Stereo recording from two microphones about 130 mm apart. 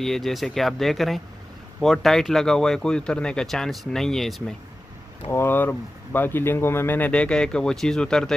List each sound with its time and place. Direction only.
0.0 s speech: centre (ahead or behind)
5.3 s speech: 15° left (ahead or behind)